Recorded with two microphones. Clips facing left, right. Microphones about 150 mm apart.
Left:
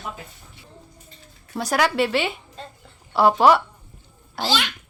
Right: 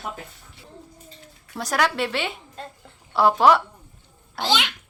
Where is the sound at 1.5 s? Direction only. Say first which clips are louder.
Left 2 dB; centre (ahead or behind).